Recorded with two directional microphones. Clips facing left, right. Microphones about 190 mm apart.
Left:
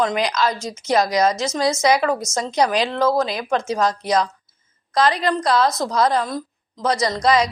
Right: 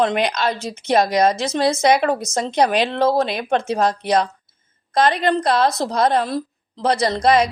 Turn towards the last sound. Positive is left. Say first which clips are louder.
# right 2 dB
turn(degrees=-55)  # may be behind; listen again after turning